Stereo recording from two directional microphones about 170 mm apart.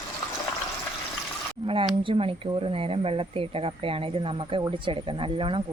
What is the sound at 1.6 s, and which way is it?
Speech, 30° right (ahead or behind).